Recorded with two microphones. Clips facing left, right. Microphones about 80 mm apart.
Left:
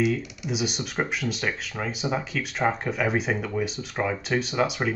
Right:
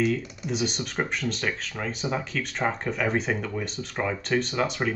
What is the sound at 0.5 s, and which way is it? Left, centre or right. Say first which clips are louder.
Speech: even; centre.